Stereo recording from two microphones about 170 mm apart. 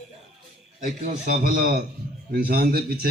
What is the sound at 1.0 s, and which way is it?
A man's voice, 55° right (ahead or behind).